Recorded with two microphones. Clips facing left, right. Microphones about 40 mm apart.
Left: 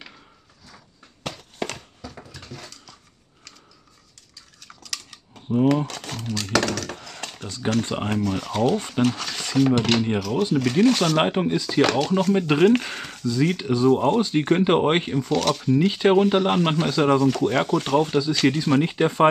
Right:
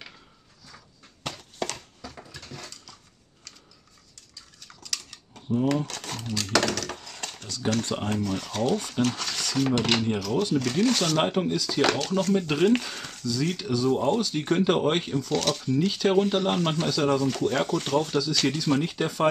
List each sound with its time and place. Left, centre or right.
1.2 s a sound: centre
4.6 s a sound: centre
5.9 s crumpling: centre
6.5 s a sound: centre
7.4 s speech: left
9.0 s speech: centre
9.9 s speech: left
11.2 s speech: left
12.4 s speech: left
15.3 s speech: centre
15.6 s speech: centre
17.2 s speech: centre